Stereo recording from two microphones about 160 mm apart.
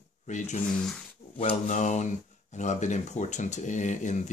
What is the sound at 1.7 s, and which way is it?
Speech, 45° left (ahead or behind).